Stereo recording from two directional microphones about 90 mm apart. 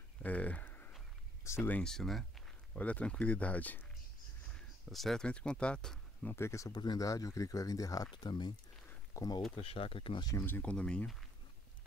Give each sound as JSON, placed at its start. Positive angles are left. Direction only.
{"t": 0.2, "sound": "a sound", "side_deg": 15}
{"t": 1.7, "sound": "speech", "side_deg": 10}
{"t": 2.7, "sound": "speech", "side_deg": 15}
{"t": 4.8, "sound": "speech", "side_deg": 0}
{"t": 6.2, "sound": "speech", "side_deg": 30}
{"t": 6.7, "sound": "speech", "side_deg": 55}
{"t": 7.1, "sound": "speech", "side_deg": 40}
{"t": 8.1, "sound": "speech", "side_deg": 55}
{"t": 9.6, "sound": "speech", "side_deg": 90}
{"t": 10.4, "sound": "speech", "side_deg": 20}